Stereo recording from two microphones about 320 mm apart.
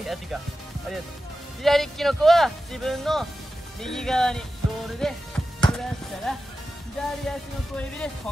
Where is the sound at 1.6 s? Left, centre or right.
Centre.